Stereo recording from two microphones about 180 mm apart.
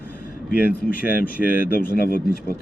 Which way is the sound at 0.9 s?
55° left (ahead or behind).